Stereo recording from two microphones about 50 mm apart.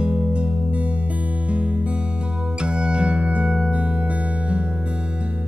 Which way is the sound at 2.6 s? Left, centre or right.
Right.